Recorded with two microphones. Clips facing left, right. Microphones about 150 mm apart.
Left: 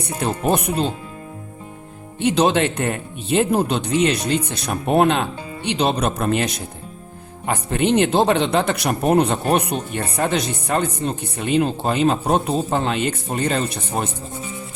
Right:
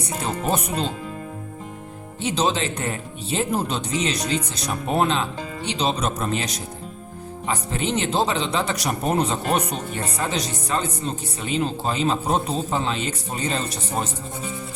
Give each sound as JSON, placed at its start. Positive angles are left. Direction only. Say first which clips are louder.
{"t": 2.2, "sound": "speech", "louder": "left 6 dB", "side_deg": 60}